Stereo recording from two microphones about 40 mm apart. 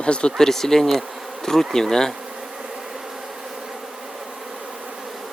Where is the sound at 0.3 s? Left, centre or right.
Centre.